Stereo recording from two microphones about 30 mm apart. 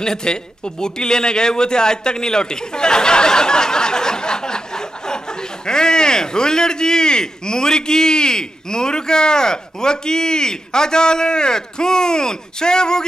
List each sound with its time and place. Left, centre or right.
0.0 s a man's voice: left